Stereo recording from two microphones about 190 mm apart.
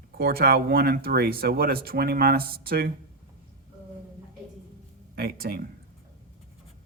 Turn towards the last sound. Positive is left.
turn(degrees=-55)  # may be behind; listen again after turning